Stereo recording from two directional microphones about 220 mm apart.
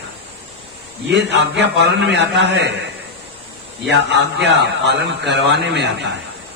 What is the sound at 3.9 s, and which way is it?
A man's voice, 50° right (ahead or behind).